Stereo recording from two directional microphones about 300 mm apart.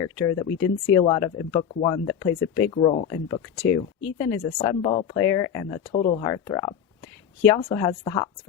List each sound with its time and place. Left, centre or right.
0.0 s speech: centre
3.2 s speech: centre